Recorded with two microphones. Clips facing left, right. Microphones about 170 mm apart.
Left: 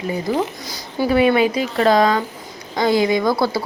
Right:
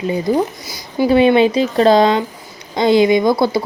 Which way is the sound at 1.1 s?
25° right (ahead or behind).